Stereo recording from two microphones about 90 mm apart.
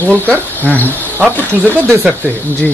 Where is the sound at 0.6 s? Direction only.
20° left (ahead or behind).